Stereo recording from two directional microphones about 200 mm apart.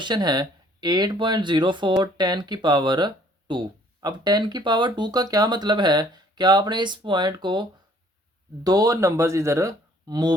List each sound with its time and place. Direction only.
0.0 s speech: 20° right (ahead or behind)